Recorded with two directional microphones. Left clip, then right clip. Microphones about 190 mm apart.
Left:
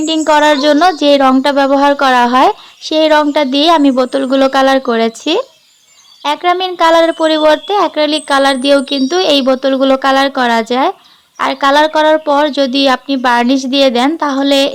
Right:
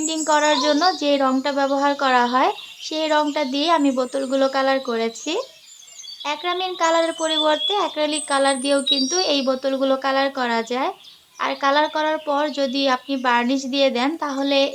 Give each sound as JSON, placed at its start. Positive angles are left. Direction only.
{"t": 0.0, "sound": "speech", "side_deg": 40}